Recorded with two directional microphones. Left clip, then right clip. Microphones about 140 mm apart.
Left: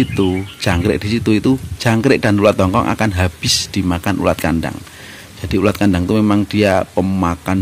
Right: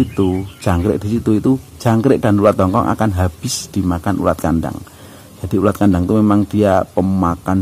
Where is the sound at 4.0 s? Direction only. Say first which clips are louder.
Even; 25° left (ahead or behind).